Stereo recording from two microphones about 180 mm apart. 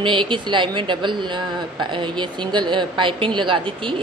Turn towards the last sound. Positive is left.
turn(degrees=-30)  # may be behind; listen again after turning